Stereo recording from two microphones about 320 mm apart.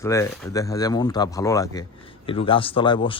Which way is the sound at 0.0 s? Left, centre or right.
Centre.